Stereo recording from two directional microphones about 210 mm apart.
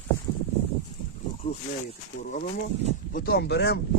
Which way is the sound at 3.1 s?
45° left (ahead or behind).